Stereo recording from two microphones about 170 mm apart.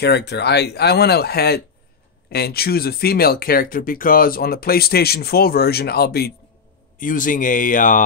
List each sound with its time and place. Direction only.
0.0 s speech: 85° left
7.0 s speech: 50° left (ahead or behind)